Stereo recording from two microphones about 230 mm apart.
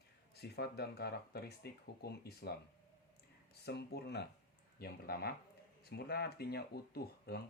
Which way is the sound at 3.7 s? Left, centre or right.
Left.